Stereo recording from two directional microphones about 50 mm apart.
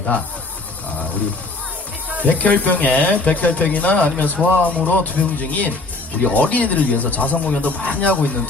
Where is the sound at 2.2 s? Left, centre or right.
Left.